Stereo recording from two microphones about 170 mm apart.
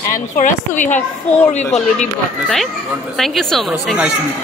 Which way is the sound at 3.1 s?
Centre (ahead or behind).